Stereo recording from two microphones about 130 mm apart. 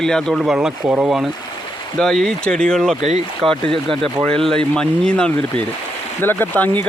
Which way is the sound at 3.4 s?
45° right (ahead or behind).